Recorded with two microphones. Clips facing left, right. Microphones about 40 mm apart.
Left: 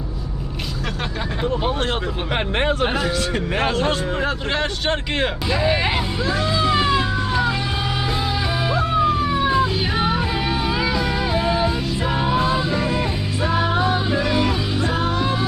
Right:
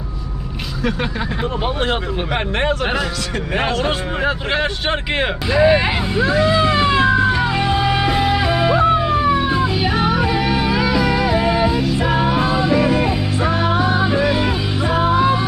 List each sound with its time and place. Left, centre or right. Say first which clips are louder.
1.6 s speech: right 6 dB; centre
3.8 s speech: right 2 dB; centre
6.1 s speech: right 6 dB; right
6.7 s music: right 4 dB; right
10.8 s music: right 4 dB; centre
11.0 s music: right 5 dB; right
11.3 s music: right 4 dB; right
14.0 s music: right 3 dB; centre